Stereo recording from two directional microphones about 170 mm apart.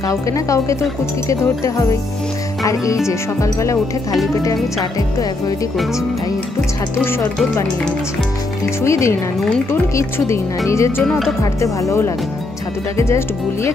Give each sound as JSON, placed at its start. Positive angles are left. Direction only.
{"t": 0.1, "sound": "speech", "side_deg": 20}
{"t": 8.8, "sound": "speech", "side_deg": 15}
{"t": 11.1, "sound": "speech", "side_deg": 0}
{"t": 11.6, "sound": "speech", "side_deg": 20}